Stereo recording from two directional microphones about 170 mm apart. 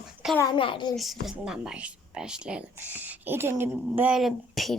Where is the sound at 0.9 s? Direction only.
Centre (ahead or behind).